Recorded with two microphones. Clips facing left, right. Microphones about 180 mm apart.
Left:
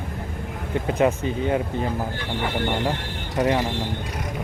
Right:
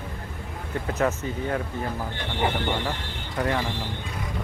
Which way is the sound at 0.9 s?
15° left (ahead or behind).